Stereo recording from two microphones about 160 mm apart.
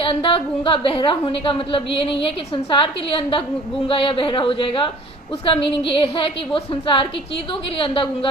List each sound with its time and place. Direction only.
0.0 s a woman's voice: 35° left (ahead or behind)